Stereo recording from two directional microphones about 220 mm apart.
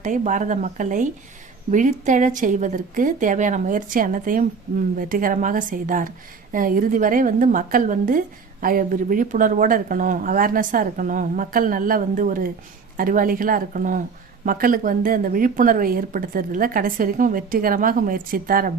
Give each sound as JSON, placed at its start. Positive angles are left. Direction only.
{"t": 0.0, "sound": "a woman's voice", "side_deg": -35}